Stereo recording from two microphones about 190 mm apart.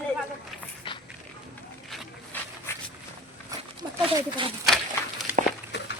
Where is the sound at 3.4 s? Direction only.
20° right (ahead or behind).